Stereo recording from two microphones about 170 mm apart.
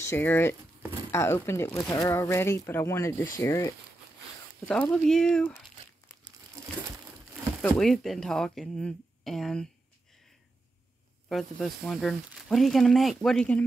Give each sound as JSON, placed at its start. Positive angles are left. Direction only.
{"t": 0.0, "sound": "speech", "side_deg": 15}
{"t": 4.6, "sound": "speech", "side_deg": 5}
{"t": 7.6, "sound": "speech", "side_deg": 0}
{"t": 11.2, "sound": "speech", "side_deg": 0}